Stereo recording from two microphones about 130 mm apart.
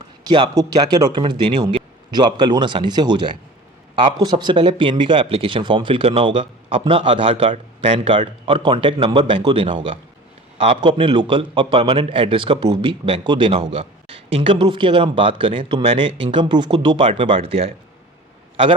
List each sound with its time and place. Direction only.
0.3 s speech: 35° right (ahead or behind)